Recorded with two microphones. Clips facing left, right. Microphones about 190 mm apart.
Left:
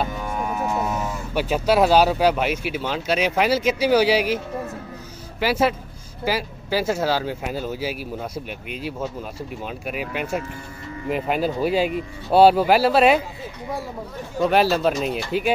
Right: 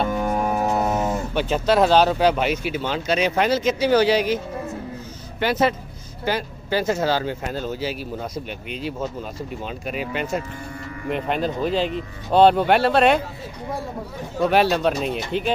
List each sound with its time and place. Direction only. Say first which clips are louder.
0.1 s music: right 5 dB; 50° right (ahead or behind)
0.8 s a sound: right 4 dB; 35° right (ahead or behind)
1.3 s speech: left 2 dB; 5° left (ahead or behind)
5.4 s speech: even; 5° left (ahead or behind)
14.4 s speech: even; centre (ahead or behind)